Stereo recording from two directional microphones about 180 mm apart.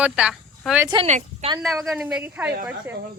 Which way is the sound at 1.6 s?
Centre (ahead or behind).